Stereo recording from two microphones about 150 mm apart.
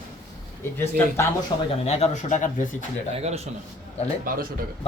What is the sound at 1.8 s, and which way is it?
Speech, 45° left (ahead or behind).